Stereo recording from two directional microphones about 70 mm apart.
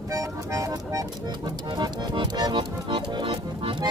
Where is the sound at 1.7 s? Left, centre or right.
Right.